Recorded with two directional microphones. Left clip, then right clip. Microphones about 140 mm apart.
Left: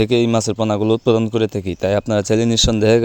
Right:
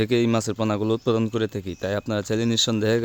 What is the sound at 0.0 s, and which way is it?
Speech, 20° left (ahead or behind).